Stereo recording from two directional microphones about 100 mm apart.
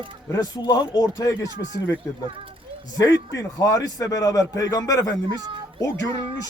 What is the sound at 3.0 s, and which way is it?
A man's voice, 35° left (ahead or behind).